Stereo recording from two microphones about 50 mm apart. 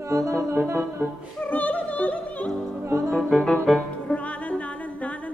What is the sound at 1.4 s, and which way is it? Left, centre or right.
Music, left.